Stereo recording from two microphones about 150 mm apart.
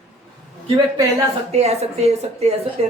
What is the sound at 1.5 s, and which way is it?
A woman's voice, 45° right (ahead or behind).